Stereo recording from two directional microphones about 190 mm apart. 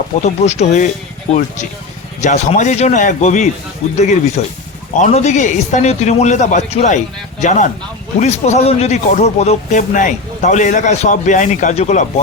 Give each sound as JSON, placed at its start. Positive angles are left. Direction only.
{"t": 0.2, "sound": "a man's voice", "side_deg": 35}